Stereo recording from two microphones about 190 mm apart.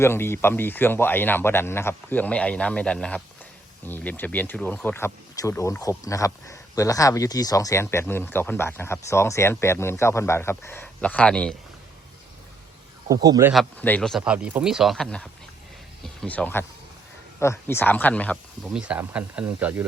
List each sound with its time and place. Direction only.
0.0 s speech: 10° left (ahead or behind)
13.1 s a man's voice: 20° right (ahead or behind)
13.5 s speech: 5° left (ahead or behind)
18.7 s speech: 5° right (ahead or behind)